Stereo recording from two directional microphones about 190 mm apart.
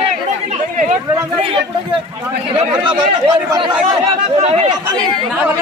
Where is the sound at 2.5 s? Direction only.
30° right (ahead or behind).